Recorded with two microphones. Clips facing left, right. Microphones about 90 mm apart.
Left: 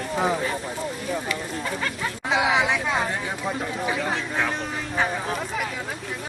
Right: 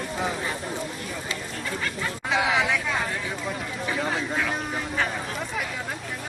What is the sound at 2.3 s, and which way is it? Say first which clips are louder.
Speech: left 2 dB; 15° left (ahead or behind).